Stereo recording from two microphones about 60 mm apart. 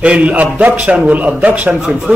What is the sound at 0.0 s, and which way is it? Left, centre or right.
A man's voice, right.